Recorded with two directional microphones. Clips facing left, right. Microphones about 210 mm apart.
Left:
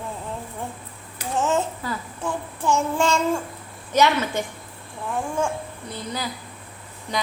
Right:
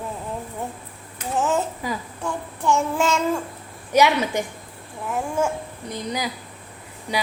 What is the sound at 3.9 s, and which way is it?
Speech, 15° right (ahead or behind).